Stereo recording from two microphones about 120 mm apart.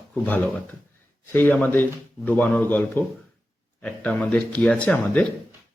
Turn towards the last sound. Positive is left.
turn(degrees=10)  # may be behind; listen again after turning